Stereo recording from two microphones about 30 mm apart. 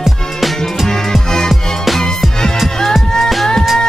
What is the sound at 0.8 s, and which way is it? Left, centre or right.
Music, centre.